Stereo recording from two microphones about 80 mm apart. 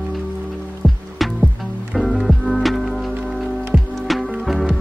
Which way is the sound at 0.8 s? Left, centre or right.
Centre.